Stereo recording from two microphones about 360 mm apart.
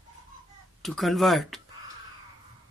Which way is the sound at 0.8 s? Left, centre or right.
Centre.